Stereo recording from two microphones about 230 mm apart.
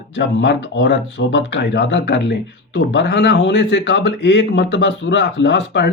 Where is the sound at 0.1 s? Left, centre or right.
Left.